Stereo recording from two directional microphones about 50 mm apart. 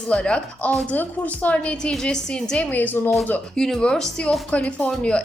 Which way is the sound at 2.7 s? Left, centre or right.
Left.